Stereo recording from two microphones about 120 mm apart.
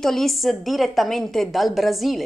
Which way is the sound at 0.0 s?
Centre (ahead or behind).